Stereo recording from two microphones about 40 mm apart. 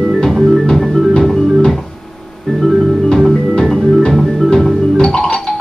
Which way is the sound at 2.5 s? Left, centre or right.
Centre.